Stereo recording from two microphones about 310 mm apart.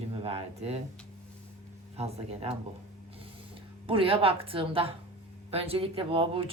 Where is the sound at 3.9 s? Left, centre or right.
Centre.